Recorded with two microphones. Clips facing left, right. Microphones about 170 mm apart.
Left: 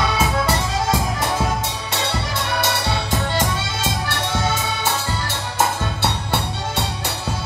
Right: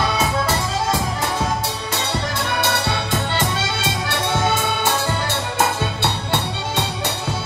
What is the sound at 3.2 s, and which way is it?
Music, 65° right (ahead or behind).